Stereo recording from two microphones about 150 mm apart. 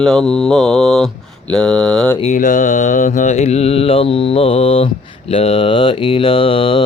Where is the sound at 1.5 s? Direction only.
5° left (ahead or behind).